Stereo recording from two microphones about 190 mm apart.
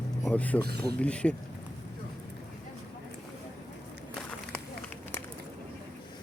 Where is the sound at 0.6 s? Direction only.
55° right (ahead or behind).